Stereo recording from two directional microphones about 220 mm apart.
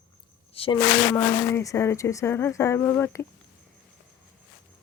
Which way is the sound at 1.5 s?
15° left (ahead or behind).